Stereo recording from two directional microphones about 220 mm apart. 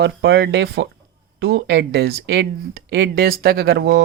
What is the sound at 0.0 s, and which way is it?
Speech, 50° right (ahead or behind).